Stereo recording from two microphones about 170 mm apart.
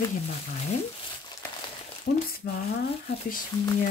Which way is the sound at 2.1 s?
90° left.